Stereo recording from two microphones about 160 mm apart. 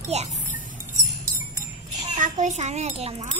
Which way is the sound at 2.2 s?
50° right (ahead or behind).